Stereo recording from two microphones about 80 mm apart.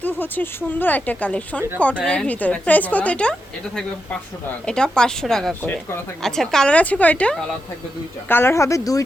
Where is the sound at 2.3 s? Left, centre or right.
Centre.